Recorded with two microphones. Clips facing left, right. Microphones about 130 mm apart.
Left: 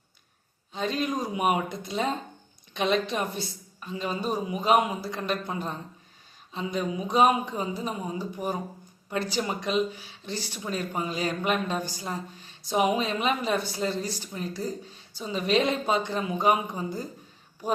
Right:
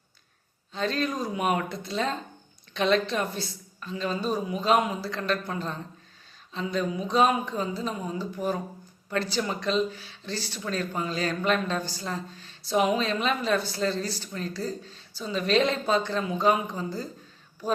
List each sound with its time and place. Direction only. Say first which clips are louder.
0.7 s speech: even; 15° left (ahead or behind)